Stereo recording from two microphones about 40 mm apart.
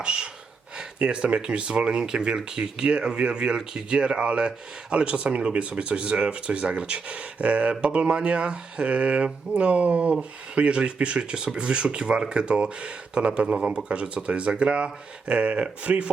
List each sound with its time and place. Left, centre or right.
0.0 s speech: right